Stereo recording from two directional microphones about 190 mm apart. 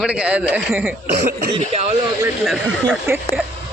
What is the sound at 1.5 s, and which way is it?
Speech, 35° right (ahead or behind).